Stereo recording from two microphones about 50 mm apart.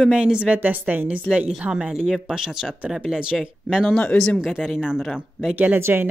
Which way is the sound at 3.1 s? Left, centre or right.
Centre.